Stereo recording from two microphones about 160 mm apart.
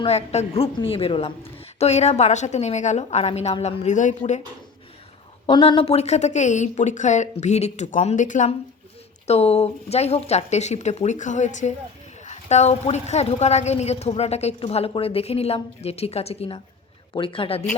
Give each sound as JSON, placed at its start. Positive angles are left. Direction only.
{"t": 0.0, "sound": "a woman's voice", "side_deg": 40}
{"t": 5.5, "sound": "a woman's voice", "side_deg": 30}
{"t": 9.2, "sound": "a woman's voice", "side_deg": 40}